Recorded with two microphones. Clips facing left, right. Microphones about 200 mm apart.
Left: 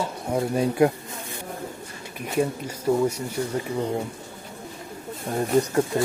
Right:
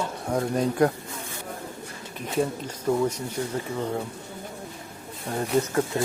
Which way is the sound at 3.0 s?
10° left (ahead or behind).